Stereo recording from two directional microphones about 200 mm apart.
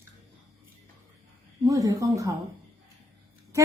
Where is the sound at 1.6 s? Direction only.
15° right (ahead or behind).